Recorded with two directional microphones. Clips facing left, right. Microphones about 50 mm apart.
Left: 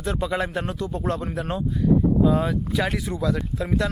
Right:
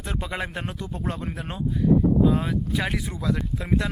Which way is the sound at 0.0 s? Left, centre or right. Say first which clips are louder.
Left 5 dB; centre.